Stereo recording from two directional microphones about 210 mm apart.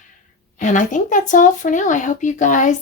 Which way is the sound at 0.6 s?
35° left (ahead or behind).